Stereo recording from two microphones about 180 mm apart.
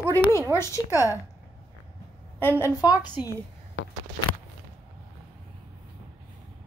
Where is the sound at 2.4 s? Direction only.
10° left (ahead or behind).